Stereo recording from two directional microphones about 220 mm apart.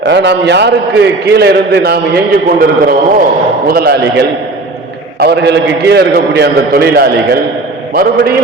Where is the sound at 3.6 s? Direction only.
45° right (ahead or behind).